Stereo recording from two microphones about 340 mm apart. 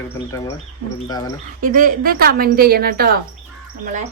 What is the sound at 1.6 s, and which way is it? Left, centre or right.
A woman's voice, right.